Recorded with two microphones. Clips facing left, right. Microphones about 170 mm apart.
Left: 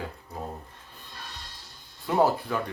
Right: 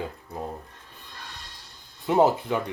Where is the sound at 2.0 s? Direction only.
20° right (ahead or behind).